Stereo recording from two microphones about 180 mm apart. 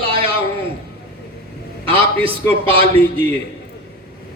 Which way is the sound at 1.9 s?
30° right (ahead or behind).